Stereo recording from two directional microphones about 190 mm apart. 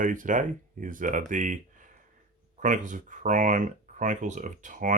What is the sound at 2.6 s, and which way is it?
Speech, 40° right (ahead or behind).